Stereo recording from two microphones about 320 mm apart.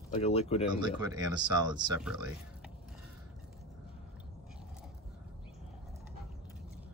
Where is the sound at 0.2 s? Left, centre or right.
Centre.